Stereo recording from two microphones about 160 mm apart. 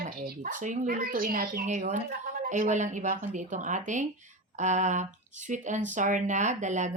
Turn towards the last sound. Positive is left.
turn(degrees=-50)  # may be behind; listen again after turning